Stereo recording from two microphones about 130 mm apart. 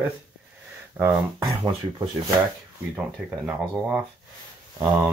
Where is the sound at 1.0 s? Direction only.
15° right (ahead or behind).